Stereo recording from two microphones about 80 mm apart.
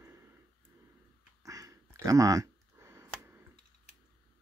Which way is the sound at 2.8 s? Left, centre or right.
Right.